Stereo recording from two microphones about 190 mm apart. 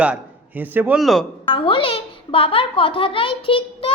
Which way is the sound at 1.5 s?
25° left (ahead or behind).